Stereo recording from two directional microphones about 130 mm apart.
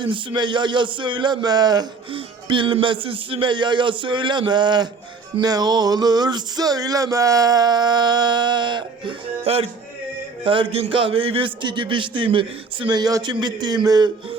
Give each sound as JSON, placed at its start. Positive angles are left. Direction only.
{"t": 0.0, "sound": "speech", "side_deg": -40}
{"t": 2.1, "sound": "speech", "side_deg": -40}